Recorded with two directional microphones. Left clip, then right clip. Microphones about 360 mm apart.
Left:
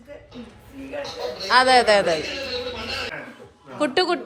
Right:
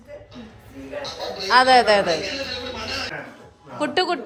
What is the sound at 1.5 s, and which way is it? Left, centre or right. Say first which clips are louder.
Speech: right 1 dB; centre.